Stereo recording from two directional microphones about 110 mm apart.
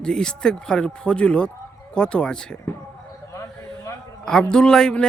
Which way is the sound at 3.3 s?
30° left (ahead or behind).